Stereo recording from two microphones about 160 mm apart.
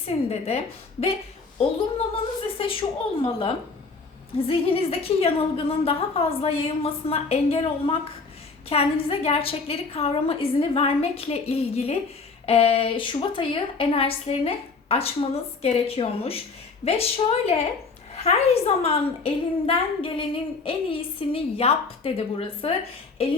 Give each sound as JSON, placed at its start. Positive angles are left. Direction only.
{"t": 0.1, "sound": "a woman's voice", "side_deg": 40}
{"t": 2.6, "sound": "a woman's voice", "side_deg": 35}